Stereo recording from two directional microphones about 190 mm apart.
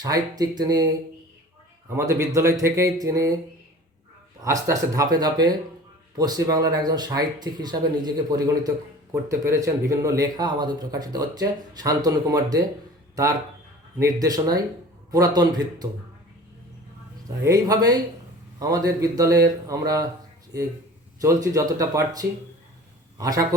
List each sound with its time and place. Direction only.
0.0 s speech: 20° right (ahead or behind)
4.4 s speech: 15° right (ahead or behind)
14.0 s speech: 20° right (ahead or behind)
17.4 s speech: 20° right (ahead or behind)
21.2 s a man's voice: 15° right (ahead or behind)